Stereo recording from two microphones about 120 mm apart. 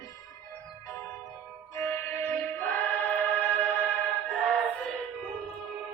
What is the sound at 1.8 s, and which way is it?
Music, 20° left (ahead or behind).